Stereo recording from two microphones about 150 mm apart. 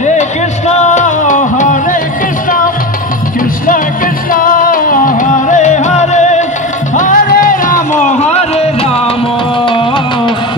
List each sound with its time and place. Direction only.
0.7 s music: 50° left (ahead or behind)
4.3 s music: 65° left (ahead or behind); by 6.4 s 50° left (ahead or behind)
7.0 s music: 65° left (ahead or behind); by 9.1 s 45° left (ahead or behind)